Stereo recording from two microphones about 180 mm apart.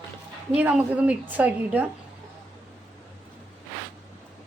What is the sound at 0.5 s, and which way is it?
A woman's voice, 10° right (ahead or behind).